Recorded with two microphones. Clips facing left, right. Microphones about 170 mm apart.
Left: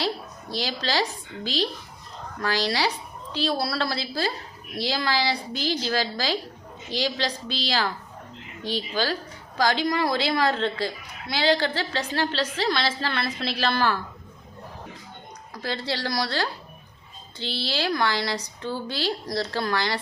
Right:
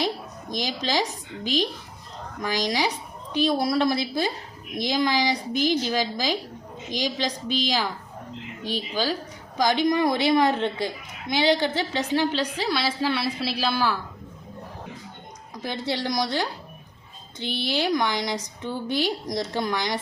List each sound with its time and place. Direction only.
0.5 s a woman's voice: 15° right (ahead or behind)
2.4 s a woman's voice: 15° right (ahead or behind)
15.5 s a woman's voice: 20° right (ahead or behind)